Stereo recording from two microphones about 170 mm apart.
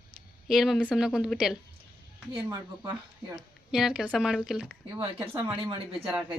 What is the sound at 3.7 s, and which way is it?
A woman's voice, 5° right (ahead or behind).